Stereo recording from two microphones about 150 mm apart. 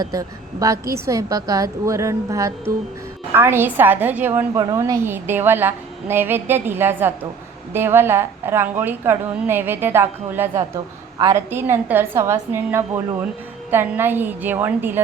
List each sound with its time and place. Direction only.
0.0 s a woman's voice: 25° right (ahead or behind)